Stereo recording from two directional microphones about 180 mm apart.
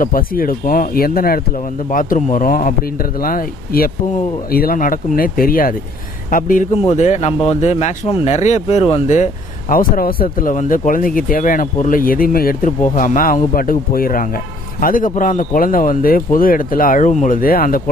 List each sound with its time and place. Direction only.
0.0 s speech: 50° left (ahead or behind)